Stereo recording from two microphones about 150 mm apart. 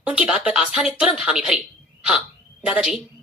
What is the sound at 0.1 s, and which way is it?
A woman's voice, 5° right (ahead or behind).